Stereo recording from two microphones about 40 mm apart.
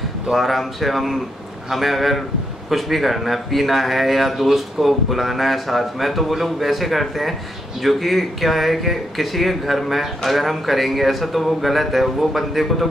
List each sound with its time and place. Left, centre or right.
0.3 s speech: centre